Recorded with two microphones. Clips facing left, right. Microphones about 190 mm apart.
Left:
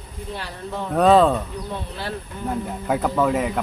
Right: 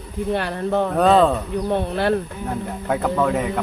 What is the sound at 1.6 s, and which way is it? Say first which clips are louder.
Speech: right 10 dB; 60° right (ahead or behind).